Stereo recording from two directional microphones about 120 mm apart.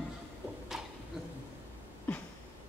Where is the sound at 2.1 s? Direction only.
15° left (ahead or behind).